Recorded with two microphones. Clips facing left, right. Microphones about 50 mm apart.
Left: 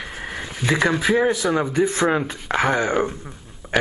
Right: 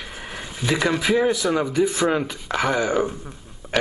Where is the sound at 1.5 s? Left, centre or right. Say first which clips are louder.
Left 1 dB; left.